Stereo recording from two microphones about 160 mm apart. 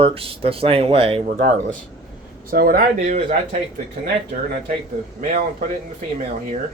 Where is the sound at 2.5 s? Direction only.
65° right (ahead or behind).